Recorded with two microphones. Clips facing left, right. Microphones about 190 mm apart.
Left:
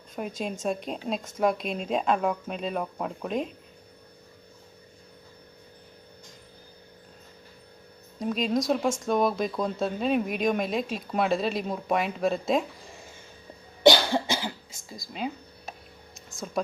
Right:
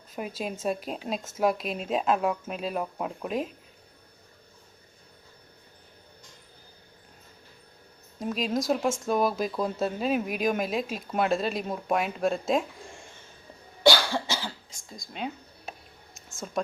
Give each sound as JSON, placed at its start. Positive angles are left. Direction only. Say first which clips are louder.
{"t": 0.2, "sound": "speech", "louder": "left 1 dB", "side_deg": -5}
{"t": 8.2, "sound": "speech", "louder": "left 2 dB", "side_deg": 0}
{"t": 13.8, "sound": "cough", "louder": "left 3 dB", "side_deg": 20}
{"t": 14.8, "sound": "speech", "louder": "left 2 dB", "side_deg": 5}